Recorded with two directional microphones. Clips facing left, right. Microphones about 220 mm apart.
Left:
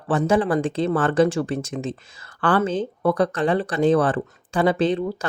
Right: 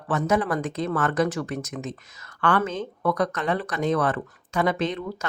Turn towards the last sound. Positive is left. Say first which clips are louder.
# left 6 dB
turn(degrees=30)  # may be behind; listen again after turning